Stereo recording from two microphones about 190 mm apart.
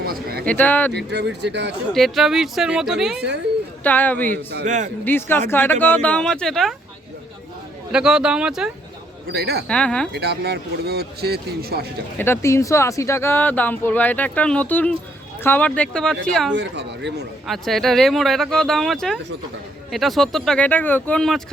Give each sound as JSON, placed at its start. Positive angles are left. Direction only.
{"t": 0.0, "sound": "a sound", "side_deg": -55}
{"t": 0.4, "sound": "speech", "side_deg": 10}
{"t": 0.9, "sound": "speech", "side_deg": -65}
{"t": 1.9, "sound": "speech", "side_deg": 0}
{"t": 3.8, "sound": "speech", "side_deg": 10}
{"t": 4.6, "sound": "a man's voice", "side_deg": -40}
{"t": 5.0, "sound": "speech", "side_deg": 10}
{"t": 7.9, "sound": "speech", "side_deg": -5}
{"t": 9.3, "sound": "speech", "side_deg": -55}
{"t": 9.6, "sound": "speech", "side_deg": 5}
{"t": 10.1, "sound": "speech", "side_deg": -60}
{"t": 12.1, "sound": "speech", "side_deg": 10}
{"t": 16.6, "sound": "speech", "side_deg": -65}
{"t": 17.4, "sound": "speech", "side_deg": 0}